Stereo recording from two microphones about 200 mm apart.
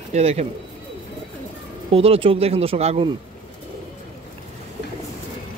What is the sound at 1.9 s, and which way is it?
Speech, 30° right (ahead or behind).